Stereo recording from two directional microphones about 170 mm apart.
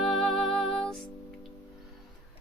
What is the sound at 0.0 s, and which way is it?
Music, centre (ahead or behind).